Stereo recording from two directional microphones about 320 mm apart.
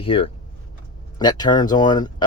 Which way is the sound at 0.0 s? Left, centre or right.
Centre.